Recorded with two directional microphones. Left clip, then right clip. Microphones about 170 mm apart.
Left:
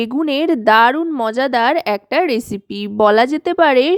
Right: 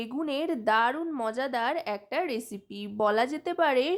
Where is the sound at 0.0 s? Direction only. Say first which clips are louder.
Left 13 dB; 45° left (ahead or behind).